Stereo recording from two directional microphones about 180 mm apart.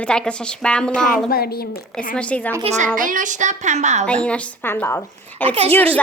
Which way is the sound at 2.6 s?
40° right (ahead or behind).